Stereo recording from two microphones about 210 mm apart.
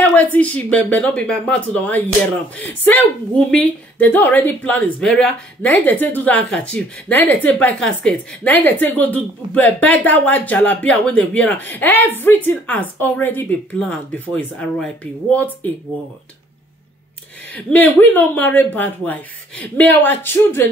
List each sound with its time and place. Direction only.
0.1 s speech: 10° left (ahead or behind)
17.6 s speech: 5° left (ahead or behind)